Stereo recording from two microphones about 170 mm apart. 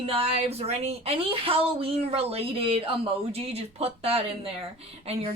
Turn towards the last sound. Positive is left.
turn(degrees=-35)  # may be behind; listen again after turning